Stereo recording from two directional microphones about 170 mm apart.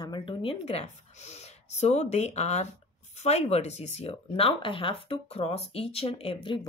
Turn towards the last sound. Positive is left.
turn(degrees=30)  # may be behind; listen again after turning